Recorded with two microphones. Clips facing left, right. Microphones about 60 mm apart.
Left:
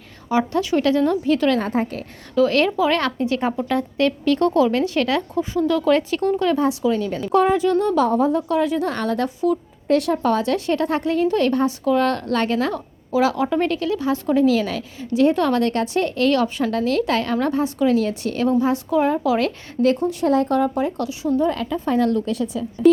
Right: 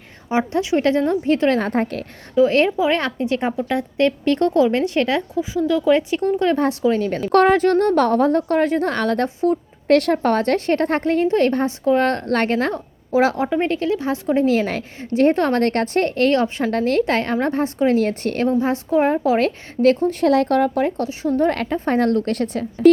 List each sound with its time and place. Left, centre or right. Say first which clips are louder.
0.3 s a woman's voice: even; right
2.3 s speech: right 2 dB; right
5.4 s speech: even; centre
6.8 s a woman's voice: right 2 dB; right
7.3 s a woman's voice: right 3 dB; right
9.2 s a woman's voice: right 1 dB; right
9.8 s a woman's voice: right 3 dB; right
18.4 s a woman's voice: left 1 dB; right
20.2 s speech: right 2 dB; right
21.0 s a woman's voice: right 1 dB; right